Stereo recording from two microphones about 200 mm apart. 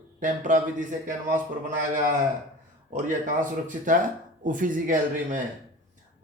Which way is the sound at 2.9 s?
40° right (ahead or behind).